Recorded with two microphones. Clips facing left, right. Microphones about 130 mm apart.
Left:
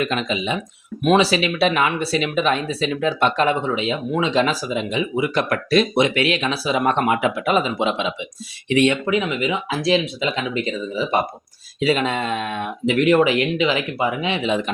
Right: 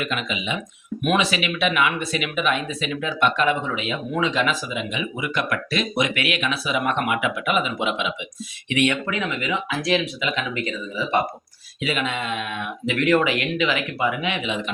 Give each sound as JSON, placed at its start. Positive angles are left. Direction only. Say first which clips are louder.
{"t": 0.0, "sound": "speech", "louder": "left 5 dB", "side_deg": 35}
{"t": 12.9, "sound": "speech", "louder": "left 4 dB", "side_deg": 20}